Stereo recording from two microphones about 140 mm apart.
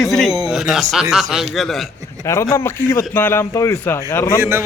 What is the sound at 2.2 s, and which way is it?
A man's voice, 20° left (ahead or behind).